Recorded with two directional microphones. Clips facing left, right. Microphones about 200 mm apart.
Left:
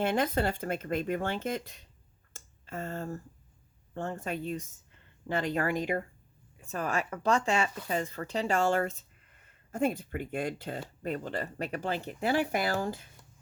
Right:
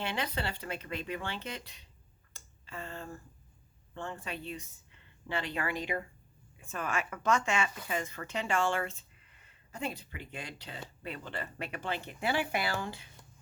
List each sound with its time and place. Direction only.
0.0 s speech: 45° left (ahead or behind)
2.3 s a sound: 45° left (ahead or behind)
3.9 s speech: 45° left (ahead or behind)